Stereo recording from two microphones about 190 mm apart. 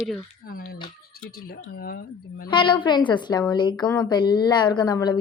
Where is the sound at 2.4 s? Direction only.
25° left (ahead or behind).